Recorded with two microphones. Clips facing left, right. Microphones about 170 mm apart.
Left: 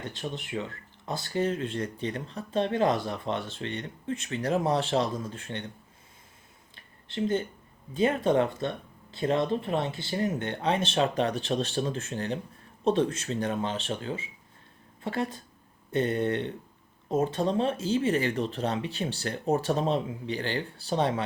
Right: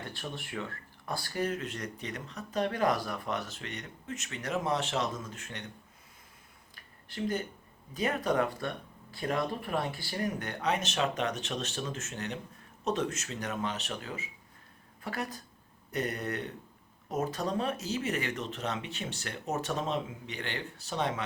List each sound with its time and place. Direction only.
0.0 s speech: 20° left (ahead or behind)
6.7 s a sound: 25° left (ahead or behind)
7.9 s speech: 25° left (ahead or behind)